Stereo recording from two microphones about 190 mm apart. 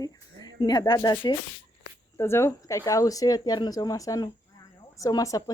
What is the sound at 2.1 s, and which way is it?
Speech, 15° left (ahead or behind).